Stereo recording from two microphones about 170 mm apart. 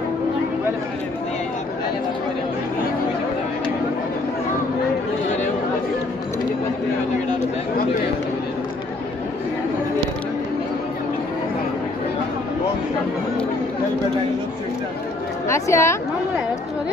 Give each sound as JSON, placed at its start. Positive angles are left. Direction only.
{"t": 15.4, "sound": "a woman's voice", "side_deg": 15}